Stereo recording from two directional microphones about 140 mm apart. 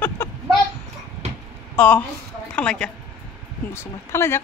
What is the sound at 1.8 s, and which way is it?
A woman's voice, 10° left (ahead or behind).